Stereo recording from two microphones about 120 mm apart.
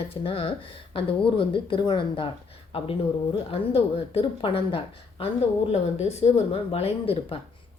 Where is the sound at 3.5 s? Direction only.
50° left (ahead or behind).